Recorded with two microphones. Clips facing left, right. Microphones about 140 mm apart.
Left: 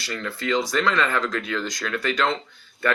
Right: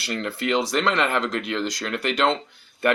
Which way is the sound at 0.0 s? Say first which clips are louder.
Right 3 dB; 30° right (ahead or behind).